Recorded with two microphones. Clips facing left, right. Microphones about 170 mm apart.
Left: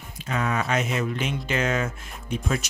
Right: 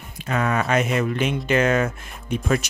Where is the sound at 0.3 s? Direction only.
60° right (ahead or behind).